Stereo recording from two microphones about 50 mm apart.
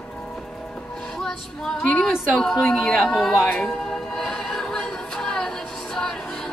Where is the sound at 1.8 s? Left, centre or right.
Left.